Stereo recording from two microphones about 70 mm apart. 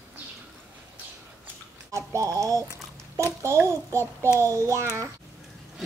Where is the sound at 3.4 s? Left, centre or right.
Right.